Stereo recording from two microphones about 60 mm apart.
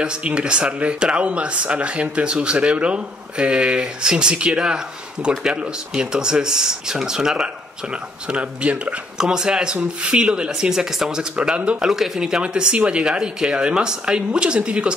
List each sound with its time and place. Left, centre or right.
0.0 s speech: centre
9.2 s speech: centre
11.9 s speech: centre